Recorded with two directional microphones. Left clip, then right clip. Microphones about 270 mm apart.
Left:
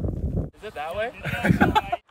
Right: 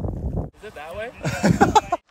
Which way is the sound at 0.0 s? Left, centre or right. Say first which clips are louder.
Right 1 dB; centre.